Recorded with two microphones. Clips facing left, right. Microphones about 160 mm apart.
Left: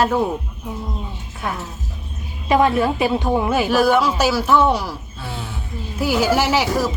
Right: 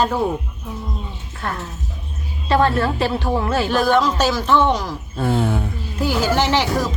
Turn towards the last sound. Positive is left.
turn(degrees=10)  # may be behind; listen again after turning